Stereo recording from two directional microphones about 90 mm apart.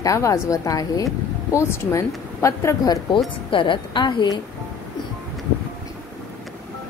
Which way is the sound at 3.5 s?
70° left (ahead or behind).